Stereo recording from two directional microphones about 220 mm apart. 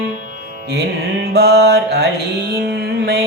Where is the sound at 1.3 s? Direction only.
50° right (ahead or behind).